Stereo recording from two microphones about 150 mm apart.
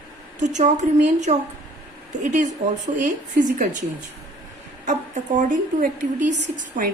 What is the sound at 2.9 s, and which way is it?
Speech, 35° right (ahead or behind).